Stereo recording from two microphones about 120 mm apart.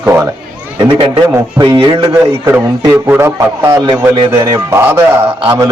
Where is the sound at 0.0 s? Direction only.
15° right (ahead or behind).